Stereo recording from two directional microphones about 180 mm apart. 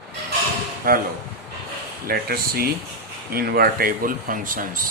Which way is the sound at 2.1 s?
60° right (ahead or behind).